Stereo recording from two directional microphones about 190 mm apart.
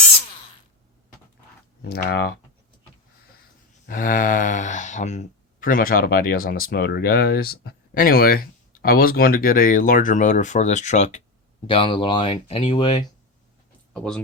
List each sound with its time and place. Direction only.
1.8 s speech: 55° left (ahead or behind)
3.8 s speech: 45° left (ahead or behind); by 13.0 s 25° left (ahead or behind)
13.9 s speech: 5° left (ahead or behind)